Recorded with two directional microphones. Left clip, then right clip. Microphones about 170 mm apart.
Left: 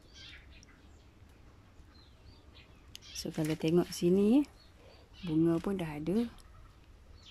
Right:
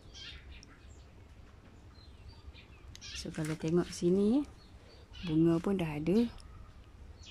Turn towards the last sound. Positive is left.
turn(degrees=0)  # may be behind; listen again after turning